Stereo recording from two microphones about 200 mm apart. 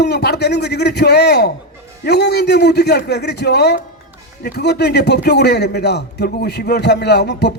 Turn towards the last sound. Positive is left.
turn(degrees=55)  # may be behind; listen again after turning